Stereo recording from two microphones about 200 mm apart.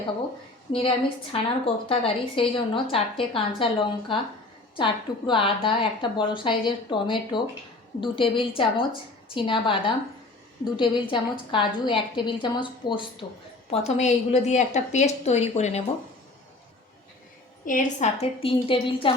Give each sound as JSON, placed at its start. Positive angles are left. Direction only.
{"t": 0.7, "sound": "a woman's voice", "side_deg": 25}
{"t": 17.7, "sound": "a woman's voice", "side_deg": 40}